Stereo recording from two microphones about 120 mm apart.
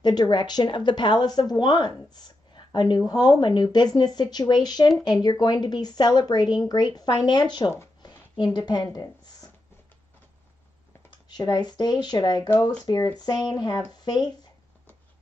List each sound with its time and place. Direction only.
0.0 s speech: 35° left (ahead or behind)
8.5 s speech: 35° left (ahead or behind)
11.1 s speech: 35° left (ahead or behind)